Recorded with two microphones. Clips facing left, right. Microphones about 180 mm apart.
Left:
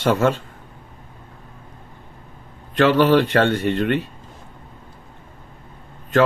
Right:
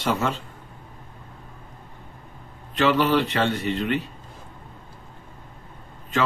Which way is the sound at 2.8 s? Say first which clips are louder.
Left 5 dB; 70° left (ahead or behind).